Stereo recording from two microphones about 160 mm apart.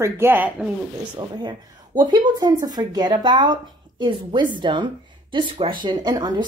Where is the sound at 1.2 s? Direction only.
25° right (ahead or behind).